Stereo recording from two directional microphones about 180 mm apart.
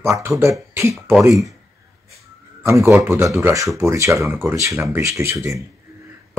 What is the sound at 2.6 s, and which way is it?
Speech, 15° right (ahead or behind).